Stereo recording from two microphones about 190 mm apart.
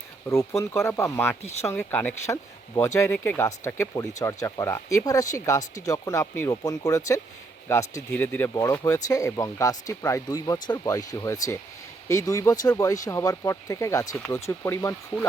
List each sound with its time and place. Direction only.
0.3 s speech: 15° left (ahead or behind)